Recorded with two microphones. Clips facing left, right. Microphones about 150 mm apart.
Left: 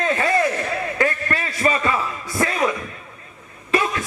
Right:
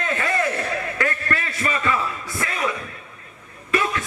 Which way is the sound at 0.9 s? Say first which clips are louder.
Left 5 dB; 25° left (ahead or behind).